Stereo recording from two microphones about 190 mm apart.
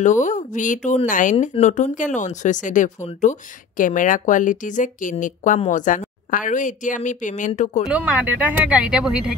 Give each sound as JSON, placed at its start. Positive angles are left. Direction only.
{"t": 0.0, "sound": "speech", "side_deg": 40}
{"t": 7.9, "sound": "speech", "side_deg": -10}